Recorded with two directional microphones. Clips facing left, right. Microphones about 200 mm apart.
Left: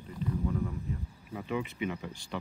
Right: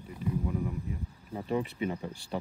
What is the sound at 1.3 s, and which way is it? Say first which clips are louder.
Speech: right 3 dB; 35° right (ahead or behind).